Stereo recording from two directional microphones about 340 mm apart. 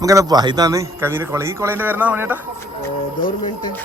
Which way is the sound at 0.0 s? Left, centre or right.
Centre.